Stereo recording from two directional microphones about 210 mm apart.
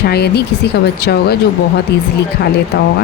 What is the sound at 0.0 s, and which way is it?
Speech, 50° left (ahead or behind).